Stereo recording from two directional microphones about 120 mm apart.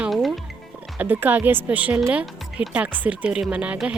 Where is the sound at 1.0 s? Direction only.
15° right (ahead or behind).